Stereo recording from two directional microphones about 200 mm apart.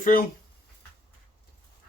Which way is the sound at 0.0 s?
40° left (ahead or behind).